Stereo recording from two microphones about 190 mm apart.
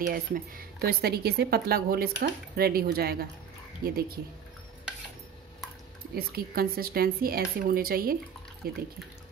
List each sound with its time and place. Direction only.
0.1 s speech: 50° right (ahead or behind)
6.1 s speech: 50° right (ahead or behind)